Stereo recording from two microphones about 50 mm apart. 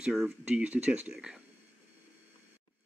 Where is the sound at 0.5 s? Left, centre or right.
Right.